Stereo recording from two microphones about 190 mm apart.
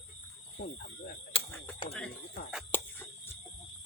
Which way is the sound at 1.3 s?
30° left (ahead or behind).